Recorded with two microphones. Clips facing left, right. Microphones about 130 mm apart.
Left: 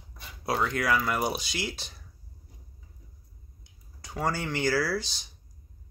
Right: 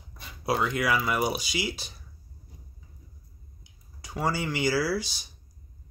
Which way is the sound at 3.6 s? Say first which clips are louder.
Right 1 dB; 5° right (ahead or behind).